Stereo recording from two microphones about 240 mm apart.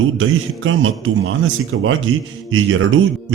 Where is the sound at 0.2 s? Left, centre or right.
Right.